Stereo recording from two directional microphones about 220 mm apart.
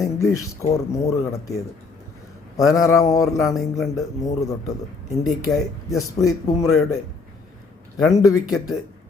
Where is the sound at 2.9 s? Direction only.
15° left (ahead or behind).